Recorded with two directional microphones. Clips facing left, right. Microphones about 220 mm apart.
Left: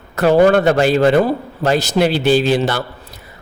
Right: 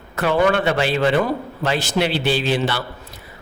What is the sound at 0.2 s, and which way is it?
A man's voice, 40° left (ahead or behind).